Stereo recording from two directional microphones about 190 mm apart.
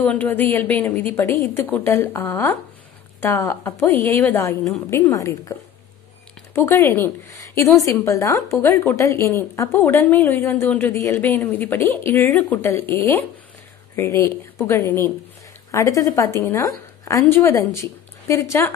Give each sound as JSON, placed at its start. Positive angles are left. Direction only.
{"t": 0.0, "sound": "a woman's voice", "side_deg": 5}
{"t": 6.5, "sound": "a woman's voice", "side_deg": 10}
{"t": 13.9, "sound": "a woman's voice", "side_deg": 15}